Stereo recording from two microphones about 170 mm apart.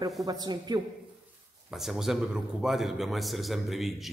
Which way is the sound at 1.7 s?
Centre (ahead or behind).